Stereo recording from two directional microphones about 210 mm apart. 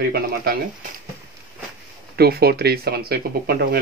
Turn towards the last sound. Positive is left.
turn(degrees=-50)  # may be behind; listen again after turning